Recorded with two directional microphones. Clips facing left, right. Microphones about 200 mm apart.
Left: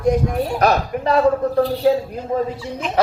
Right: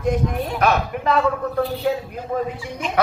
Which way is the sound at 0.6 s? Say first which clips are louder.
Left 1 dB; 40° left (ahead or behind).